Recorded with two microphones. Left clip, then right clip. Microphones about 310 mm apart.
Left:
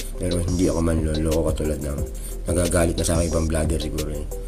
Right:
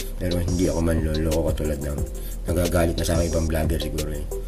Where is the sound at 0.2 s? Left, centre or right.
Centre.